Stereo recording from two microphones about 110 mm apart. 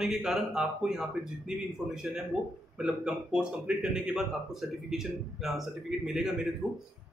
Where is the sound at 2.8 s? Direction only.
10° right (ahead or behind).